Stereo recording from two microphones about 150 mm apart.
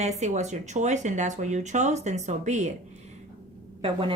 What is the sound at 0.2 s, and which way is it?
Speech, 50° right (ahead or behind).